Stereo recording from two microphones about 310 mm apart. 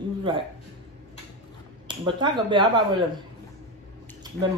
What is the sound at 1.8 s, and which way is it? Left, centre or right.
Speech, centre.